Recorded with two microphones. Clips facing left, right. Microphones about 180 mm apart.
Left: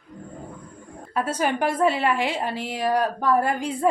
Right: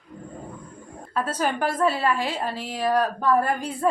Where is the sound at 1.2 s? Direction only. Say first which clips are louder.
Left 1 dB; 15° left (ahead or behind).